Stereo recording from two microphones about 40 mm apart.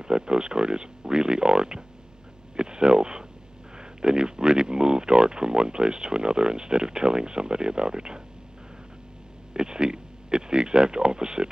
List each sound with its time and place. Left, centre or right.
0.0 s speech: centre
9.5 s speech: centre